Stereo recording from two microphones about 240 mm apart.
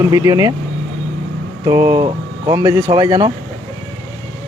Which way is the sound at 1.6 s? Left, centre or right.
Centre.